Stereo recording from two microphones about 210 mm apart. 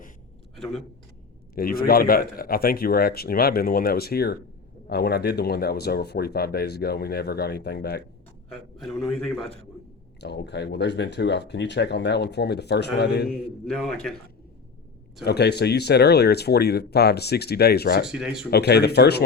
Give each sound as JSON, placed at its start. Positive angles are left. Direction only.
{"t": 0.5, "sound": "a sound", "side_deg": 0}
{"t": 1.5, "sound": "speech", "side_deg": 45}
{"t": 8.8, "sound": "a man's voice", "side_deg": 0}
{"t": 10.2, "sound": "speech", "side_deg": 55}
{"t": 13.7, "sound": "a man's voice", "side_deg": 5}
{"t": 15.2, "sound": "speech", "side_deg": 50}
{"t": 18.0, "sound": "a man's voice", "side_deg": -5}
{"t": 18.5, "sound": "speech", "side_deg": 50}